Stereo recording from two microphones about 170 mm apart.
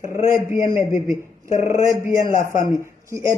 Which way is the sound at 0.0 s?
15° right (ahead or behind).